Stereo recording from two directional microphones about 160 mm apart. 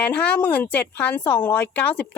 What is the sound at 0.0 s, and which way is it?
A woman's voice, 10° left (ahead or behind).